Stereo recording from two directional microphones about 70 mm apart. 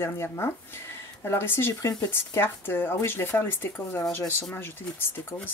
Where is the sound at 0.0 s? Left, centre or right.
Left.